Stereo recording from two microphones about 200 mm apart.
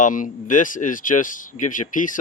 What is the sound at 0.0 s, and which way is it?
Speech, 40° left (ahead or behind).